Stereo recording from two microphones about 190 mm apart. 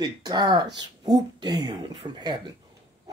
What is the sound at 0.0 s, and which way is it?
Speech, 20° right (ahead or behind).